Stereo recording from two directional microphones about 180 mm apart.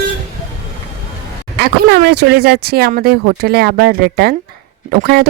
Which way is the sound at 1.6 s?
60° right (ahead or behind).